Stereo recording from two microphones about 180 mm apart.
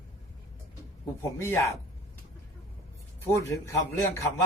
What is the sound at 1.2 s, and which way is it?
Speech, 15° left (ahead or behind).